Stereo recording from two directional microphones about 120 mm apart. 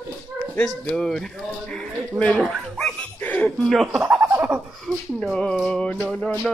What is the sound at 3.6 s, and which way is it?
Speech, 5° left (ahead or behind).